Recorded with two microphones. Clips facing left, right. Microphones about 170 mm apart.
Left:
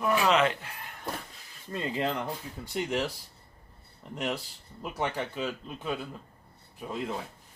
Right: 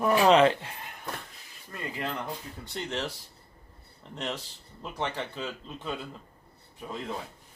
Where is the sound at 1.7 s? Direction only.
25° left (ahead or behind).